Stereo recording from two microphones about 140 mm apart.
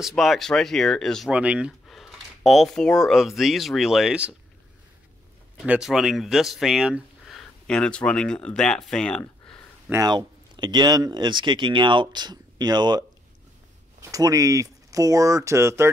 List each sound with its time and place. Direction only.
0.0 s speech: centre (ahead or behind)
1.3 s speech: 10° right (ahead or behind)
5.6 s speech: 5° right (ahead or behind)
10.0 s speech: 30° right (ahead or behind)
14.0 s speech: 25° right (ahead or behind)